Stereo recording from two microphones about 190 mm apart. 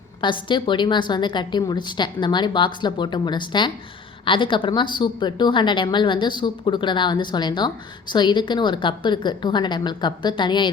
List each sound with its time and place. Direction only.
0.2 s a woman's voice: 25° left (ahead or behind)